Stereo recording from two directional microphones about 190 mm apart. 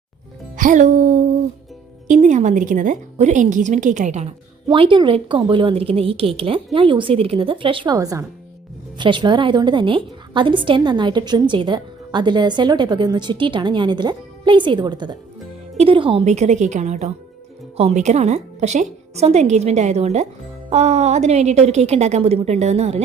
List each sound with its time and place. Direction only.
0.5 s a woman's voice: 40° right (ahead or behind)